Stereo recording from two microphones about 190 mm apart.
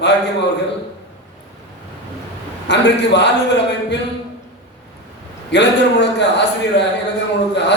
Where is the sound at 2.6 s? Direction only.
65° left (ahead or behind).